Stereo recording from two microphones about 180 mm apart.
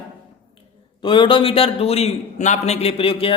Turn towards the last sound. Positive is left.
turn(degrees=30)  # may be behind; listen again after turning